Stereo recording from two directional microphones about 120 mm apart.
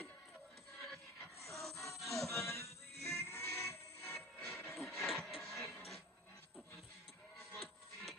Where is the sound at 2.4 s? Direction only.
55° right (ahead or behind).